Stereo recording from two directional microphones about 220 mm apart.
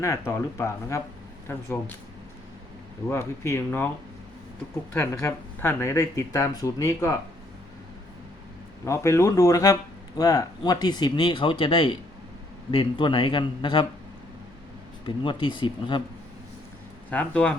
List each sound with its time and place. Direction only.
0.0 s speech: 15° left (ahead or behind)
3.1 s speech: 10° left (ahead or behind)
4.9 s speech: 10° left (ahead or behind)
8.8 s speech: 15° left (ahead or behind)
15.0 s speech: 20° left (ahead or behind)
17.1 s speech: 5° left (ahead or behind)